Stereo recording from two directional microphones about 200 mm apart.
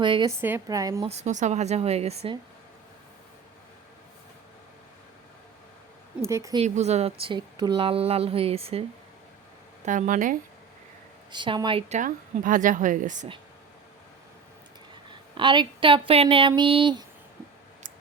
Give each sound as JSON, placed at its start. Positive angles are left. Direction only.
{"t": 0.0, "sound": "speech", "side_deg": -25}
{"t": 0.3, "sound": "a woman's voice", "side_deg": -10}
{"t": 1.0, "sound": "a woman's voice", "side_deg": -35}
{"t": 6.2, "sound": "a woman's voice", "side_deg": -15}
{"t": 6.6, "sound": "speech", "side_deg": -35}
{"t": 9.8, "sound": "a woman's voice", "side_deg": -40}
{"t": 11.3, "sound": "a woman's voice", "side_deg": -20}
{"t": 15.4, "sound": "speech", "side_deg": -25}